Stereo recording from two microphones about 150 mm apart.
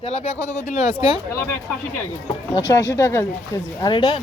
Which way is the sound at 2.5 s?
25° left (ahead or behind).